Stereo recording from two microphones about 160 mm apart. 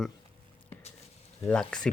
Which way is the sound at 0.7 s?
10° left (ahead or behind).